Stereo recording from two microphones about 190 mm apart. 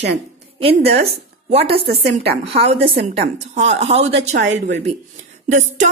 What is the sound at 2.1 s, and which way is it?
Speech, 30° right (ahead or behind).